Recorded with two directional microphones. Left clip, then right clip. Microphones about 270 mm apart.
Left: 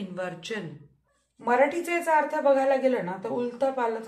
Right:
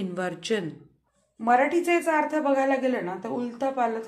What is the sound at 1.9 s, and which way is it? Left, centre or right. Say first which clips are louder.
A woman's voice: right 1 dB; centre.